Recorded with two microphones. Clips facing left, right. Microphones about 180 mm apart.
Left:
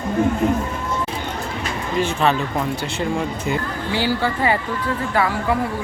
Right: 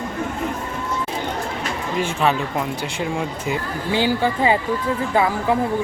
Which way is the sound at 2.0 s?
10° right (ahead or behind).